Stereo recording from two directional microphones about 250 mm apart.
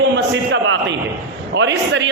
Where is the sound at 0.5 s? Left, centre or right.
Right.